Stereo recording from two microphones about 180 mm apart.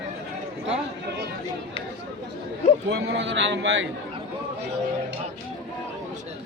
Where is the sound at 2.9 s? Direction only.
75° right (ahead or behind).